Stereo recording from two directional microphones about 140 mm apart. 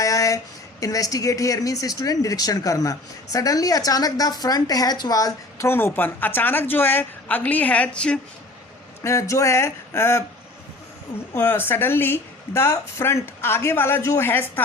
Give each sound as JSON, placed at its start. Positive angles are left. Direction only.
{"t": 0.0, "sound": "a sound", "side_deg": 25}
{"t": 0.8, "sound": "speech", "side_deg": 25}
{"t": 9.0, "sound": "speech", "side_deg": 20}
{"t": 11.3, "sound": "speech", "side_deg": 15}